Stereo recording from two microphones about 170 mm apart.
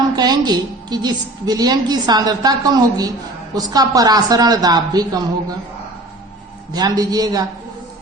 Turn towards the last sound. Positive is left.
turn(degrees=-25)  # may be behind; listen again after turning